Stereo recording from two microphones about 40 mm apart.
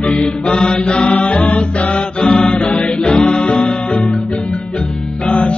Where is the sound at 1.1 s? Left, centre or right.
Left.